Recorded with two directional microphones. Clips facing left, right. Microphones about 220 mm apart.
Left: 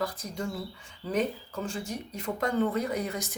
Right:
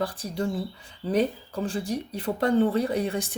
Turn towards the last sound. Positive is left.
turn(degrees=-30)  # may be behind; listen again after turning